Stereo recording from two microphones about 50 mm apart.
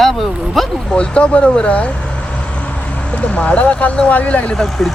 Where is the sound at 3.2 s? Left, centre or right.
Left.